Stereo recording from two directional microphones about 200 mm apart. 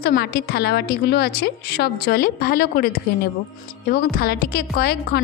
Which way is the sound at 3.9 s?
50° left (ahead or behind).